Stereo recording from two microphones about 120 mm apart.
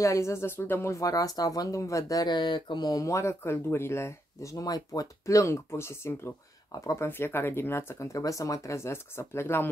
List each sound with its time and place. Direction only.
0.0 s speech: 25° left (ahead or behind)